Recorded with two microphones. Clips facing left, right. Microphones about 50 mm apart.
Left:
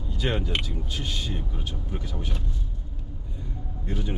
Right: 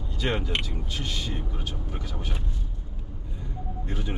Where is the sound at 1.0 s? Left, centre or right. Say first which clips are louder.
Even; right.